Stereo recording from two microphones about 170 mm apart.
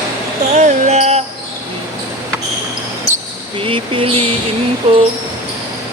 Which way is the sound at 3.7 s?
30° right (ahead or behind).